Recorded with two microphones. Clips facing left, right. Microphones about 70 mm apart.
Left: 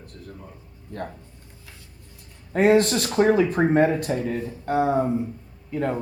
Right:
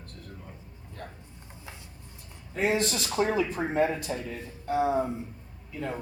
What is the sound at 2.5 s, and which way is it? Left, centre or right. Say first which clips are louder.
A man's voice: left 9 dB; left.